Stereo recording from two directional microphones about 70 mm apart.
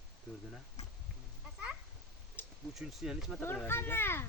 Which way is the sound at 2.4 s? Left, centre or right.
Left.